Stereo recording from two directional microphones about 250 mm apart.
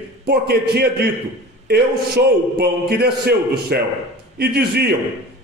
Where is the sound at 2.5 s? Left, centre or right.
Right.